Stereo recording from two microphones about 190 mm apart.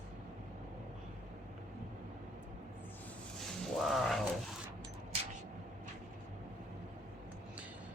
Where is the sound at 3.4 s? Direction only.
Centre (ahead or behind).